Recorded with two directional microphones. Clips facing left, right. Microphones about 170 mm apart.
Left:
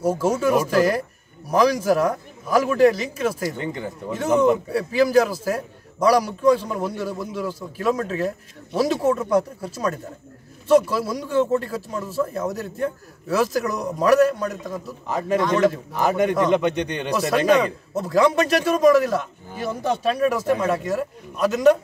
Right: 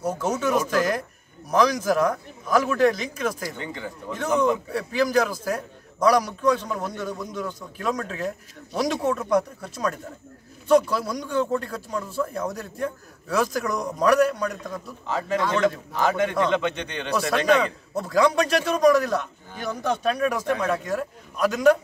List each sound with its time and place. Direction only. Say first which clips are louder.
0.0 s a man's voice: left 5 dB; 5° left (ahead or behind)
9.3 s speech: left 2 dB; 5° left (ahead or behind)
15.1 s a man's voice: left 4 dB; 15° left (ahead or behind)
17.3 s speech: left 3 dB; centre (ahead or behind)